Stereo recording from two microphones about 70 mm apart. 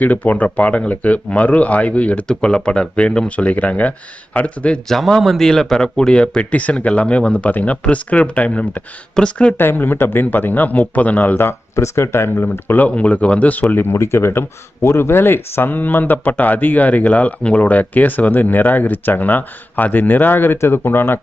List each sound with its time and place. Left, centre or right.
0.0 s a man's voice: left
4.9 s a man's voice: centre
9.6 s speech: left
13.9 s speech: left